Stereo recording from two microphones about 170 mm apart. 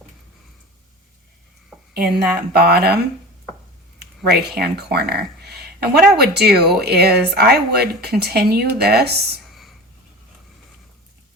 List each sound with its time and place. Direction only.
1.9 s speech: 65° right (ahead or behind)
4.0 s speech: 70° right (ahead or behind)